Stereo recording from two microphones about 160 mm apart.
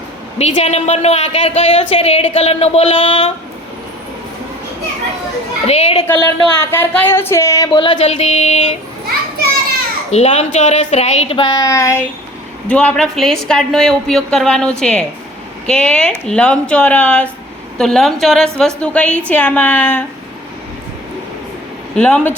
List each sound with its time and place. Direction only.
0.3 s a woman's voice: 45° left (ahead or behind)
5.6 s a woman's voice: 40° left (ahead or behind)
6.1 s speech: 15° left (ahead or behind)
8.2 s a sound: 45° left (ahead or behind)
10.1 s a woman's voice: 40° left (ahead or behind)
11.5 s a sound: 20° left (ahead or behind)
12.6 s speech: 10° left (ahead or behind)
21.9 s speech: 5° left (ahead or behind)